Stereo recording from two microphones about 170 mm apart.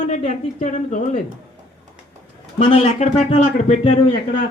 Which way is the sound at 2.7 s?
40° left (ahead or behind).